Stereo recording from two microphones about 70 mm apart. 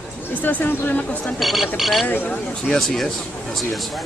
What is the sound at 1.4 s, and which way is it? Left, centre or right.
Speech, centre.